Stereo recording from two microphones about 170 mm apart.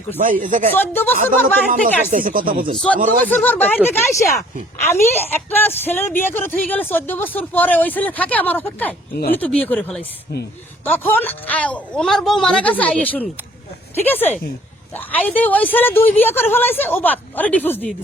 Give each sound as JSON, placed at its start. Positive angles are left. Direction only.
{"t": 0.2, "sound": "speech", "side_deg": -50}
{"t": 0.7, "sound": "a woman's voice", "side_deg": 10}
{"t": 1.8, "sound": "speech", "side_deg": -50}
{"t": 3.2, "sound": "a woman's voice", "side_deg": 10}